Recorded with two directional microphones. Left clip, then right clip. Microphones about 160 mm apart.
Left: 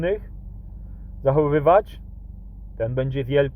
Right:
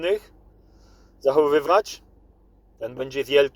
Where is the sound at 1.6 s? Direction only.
15° right (ahead or behind).